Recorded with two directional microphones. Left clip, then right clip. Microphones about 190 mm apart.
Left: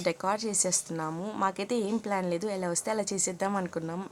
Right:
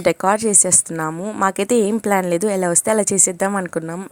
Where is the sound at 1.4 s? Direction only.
40° right (ahead or behind).